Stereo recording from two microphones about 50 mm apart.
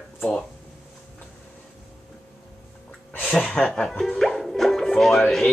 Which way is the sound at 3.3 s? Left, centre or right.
Centre.